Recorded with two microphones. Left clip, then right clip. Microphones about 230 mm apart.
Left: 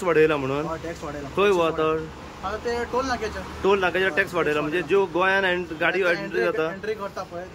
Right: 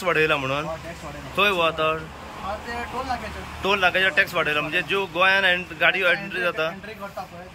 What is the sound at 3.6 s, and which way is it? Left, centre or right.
Speech, centre.